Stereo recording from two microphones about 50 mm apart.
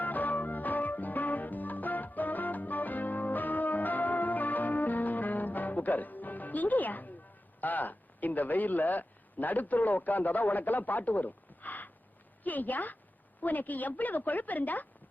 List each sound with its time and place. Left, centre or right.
0.0 s music: left
7.6 s a woman's voice: left